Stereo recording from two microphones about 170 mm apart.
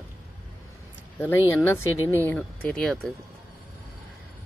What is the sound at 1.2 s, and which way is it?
Speech, 10° left (ahead or behind).